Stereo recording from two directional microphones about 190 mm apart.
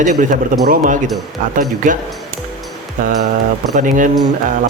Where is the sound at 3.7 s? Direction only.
40° right (ahead or behind).